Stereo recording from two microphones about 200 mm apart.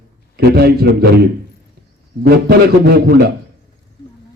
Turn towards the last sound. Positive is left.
turn(degrees=-50)  # may be behind; listen again after turning